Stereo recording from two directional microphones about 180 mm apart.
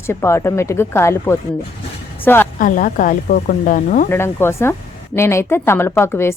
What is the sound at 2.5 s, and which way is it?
Speech, 50° left (ahead or behind).